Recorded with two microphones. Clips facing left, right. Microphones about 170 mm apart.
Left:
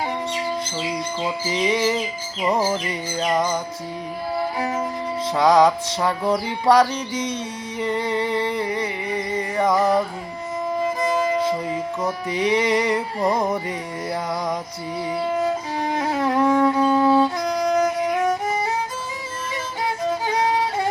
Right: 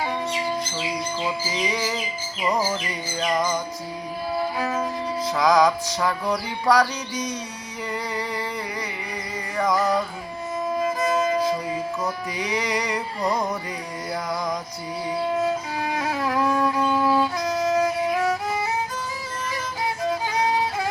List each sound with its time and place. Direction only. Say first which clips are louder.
1.5 s music: left 5 dB; 25° left (ahead or behind)
4.5 s music: left 1 dB; 15° left (ahead or behind)
5.3 s music: left 3 dB; 30° left (ahead or behind)
11.3 s music: left 1 dB; 25° left (ahead or behind)
15.8 s music: left 6 dB; 25° left (ahead or behind)